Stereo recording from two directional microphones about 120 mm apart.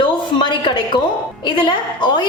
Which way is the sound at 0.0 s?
40° left (ahead or behind).